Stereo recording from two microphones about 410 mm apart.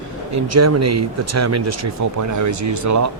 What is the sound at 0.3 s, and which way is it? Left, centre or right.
Speech, right.